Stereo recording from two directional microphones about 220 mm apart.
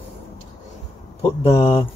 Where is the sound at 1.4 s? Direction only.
25° left (ahead or behind).